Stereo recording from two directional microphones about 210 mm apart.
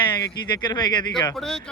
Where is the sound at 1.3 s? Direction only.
Centre (ahead or behind).